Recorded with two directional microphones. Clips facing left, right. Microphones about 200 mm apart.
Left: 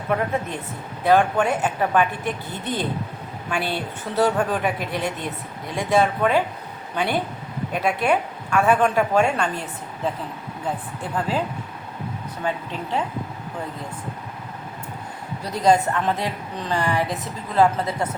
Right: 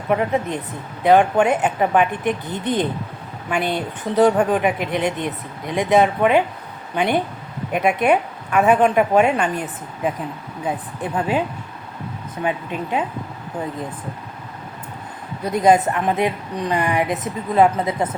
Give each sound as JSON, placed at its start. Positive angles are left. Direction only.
{"t": 0.1, "sound": "a woman's voice", "side_deg": -15}
{"t": 12.5, "sound": "a woman's voice", "side_deg": -15}
{"t": 15.5, "sound": "a woman's voice", "side_deg": -20}